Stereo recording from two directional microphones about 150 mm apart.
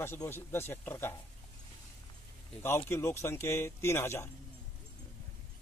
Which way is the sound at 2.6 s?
15° left (ahead or behind).